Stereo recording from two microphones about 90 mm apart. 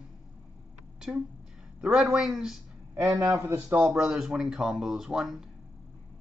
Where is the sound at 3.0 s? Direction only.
35° right (ahead or behind).